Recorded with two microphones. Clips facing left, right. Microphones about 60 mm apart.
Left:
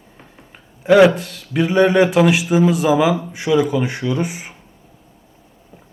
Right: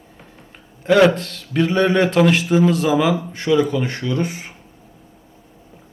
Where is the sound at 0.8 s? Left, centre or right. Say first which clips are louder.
Left 3 dB; centre.